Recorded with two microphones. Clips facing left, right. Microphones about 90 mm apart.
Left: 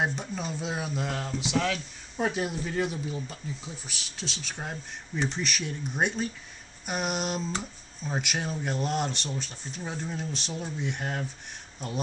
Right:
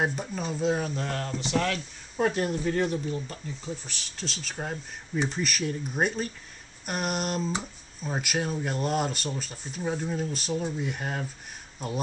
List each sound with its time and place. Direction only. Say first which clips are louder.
0.0 s speech: right 1 dB; centre (ahead or behind)